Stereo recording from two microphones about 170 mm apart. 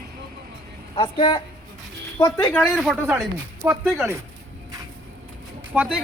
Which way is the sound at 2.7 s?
Centre (ahead or behind).